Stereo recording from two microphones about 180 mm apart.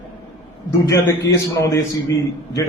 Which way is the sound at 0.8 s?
15° left (ahead or behind).